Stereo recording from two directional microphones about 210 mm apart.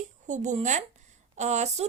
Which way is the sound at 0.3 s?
35° right (ahead or behind).